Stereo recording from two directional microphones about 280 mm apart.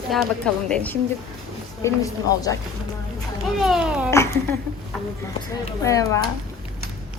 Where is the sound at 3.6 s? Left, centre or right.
Centre.